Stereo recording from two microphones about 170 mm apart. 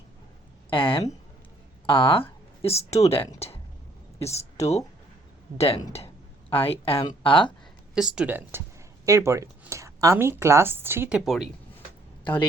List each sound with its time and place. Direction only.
0.7 s speech: 30° left (ahead or behind)
7.9 s speech: 5° right (ahead or behind)